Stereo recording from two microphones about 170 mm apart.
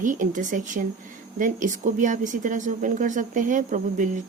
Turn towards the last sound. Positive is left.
turn(degrees=-50)  # may be behind; listen again after turning